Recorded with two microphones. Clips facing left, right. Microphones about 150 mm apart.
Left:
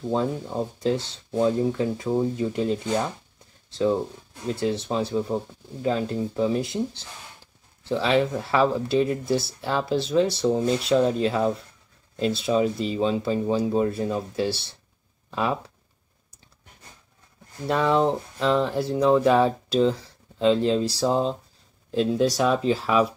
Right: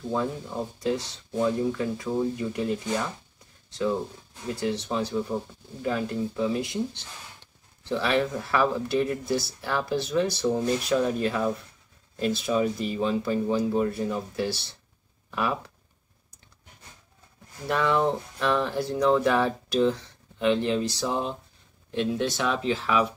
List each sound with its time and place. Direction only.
0.8 s speech: 25° left (ahead or behind)
4.6 s speech: 25° left (ahead or behind)
17.6 s speech: 20° left (ahead or behind)